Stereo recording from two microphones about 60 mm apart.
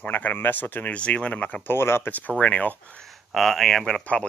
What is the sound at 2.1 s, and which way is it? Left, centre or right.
Speech, left.